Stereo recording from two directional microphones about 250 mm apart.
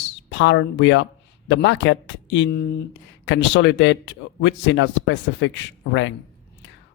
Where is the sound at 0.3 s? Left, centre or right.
Left.